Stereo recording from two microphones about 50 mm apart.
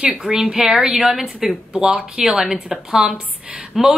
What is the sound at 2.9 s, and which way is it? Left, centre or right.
Speech, right.